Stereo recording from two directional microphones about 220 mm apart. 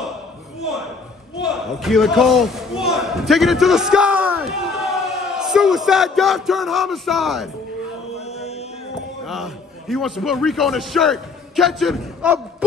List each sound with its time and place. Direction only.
1.4 s speech: centre (ahead or behind)
8.3 s chant: 30° left (ahead or behind)
9.2 s a man's voice: centre (ahead or behind)